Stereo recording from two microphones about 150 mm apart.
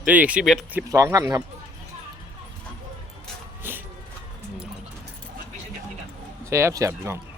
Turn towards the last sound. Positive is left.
turn(degrees=-20)  # may be behind; listen again after turning